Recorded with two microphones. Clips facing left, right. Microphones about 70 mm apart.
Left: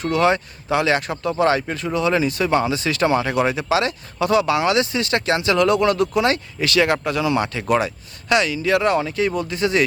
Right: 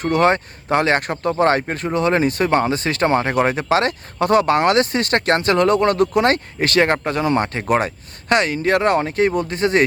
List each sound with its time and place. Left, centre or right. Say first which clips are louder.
0.0 s speech: right 2 dB; right